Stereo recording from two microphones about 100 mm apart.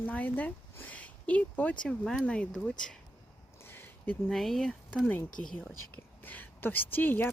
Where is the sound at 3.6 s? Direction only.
25° left (ahead or behind).